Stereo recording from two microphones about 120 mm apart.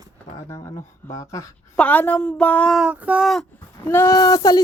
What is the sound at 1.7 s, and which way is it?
A woman's voice, 10° left (ahead or behind).